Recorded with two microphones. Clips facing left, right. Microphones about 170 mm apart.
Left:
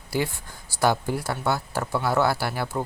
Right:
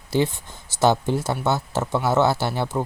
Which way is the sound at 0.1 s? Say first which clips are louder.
Right 5 dB; 20° right (ahead or behind).